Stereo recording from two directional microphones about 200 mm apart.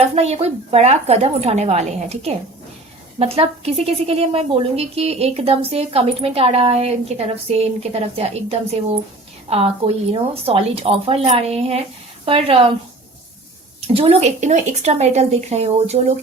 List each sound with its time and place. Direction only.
0.2 s a woman's voice: 30° right (ahead or behind)
13.8 s a woman's voice: 30° right (ahead or behind)